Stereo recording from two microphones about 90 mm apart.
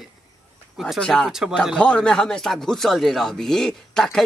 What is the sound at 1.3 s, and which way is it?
Speech, 5° right (ahead or behind).